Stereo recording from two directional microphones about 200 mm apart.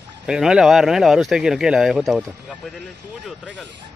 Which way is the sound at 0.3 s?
5° right (ahead or behind).